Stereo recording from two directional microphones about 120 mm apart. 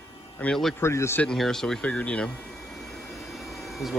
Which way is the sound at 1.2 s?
5° left (ahead or behind).